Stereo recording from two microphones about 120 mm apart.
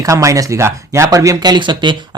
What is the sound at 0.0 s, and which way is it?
Speech, 25° right (ahead or behind).